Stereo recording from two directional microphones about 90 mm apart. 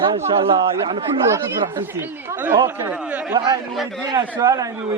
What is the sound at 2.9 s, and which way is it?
Speech, 15° right (ahead or behind).